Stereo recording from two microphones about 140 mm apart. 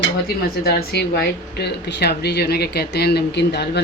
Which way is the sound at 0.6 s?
90° left.